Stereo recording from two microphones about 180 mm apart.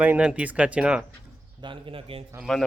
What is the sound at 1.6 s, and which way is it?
Speech, 30° right (ahead or behind).